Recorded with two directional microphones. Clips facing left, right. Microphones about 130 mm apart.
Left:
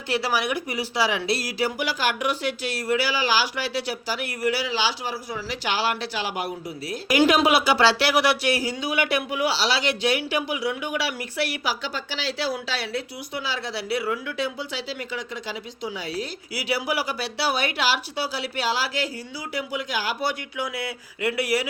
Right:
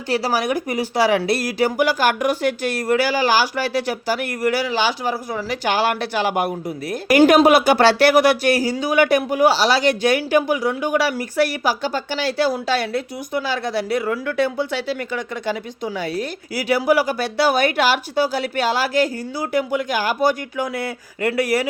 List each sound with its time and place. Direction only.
0.1 s speech: 40° right (ahead or behind)